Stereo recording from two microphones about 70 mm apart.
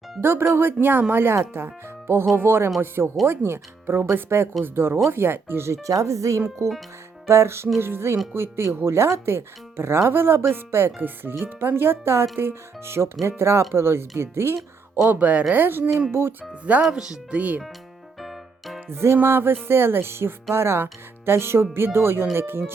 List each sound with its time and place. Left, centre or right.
0.2 s speech: right
15.0 s speech: right
16.2 s speech: right
16.8 s speech: centre
18.2 s music: centre
18.9 s speech: right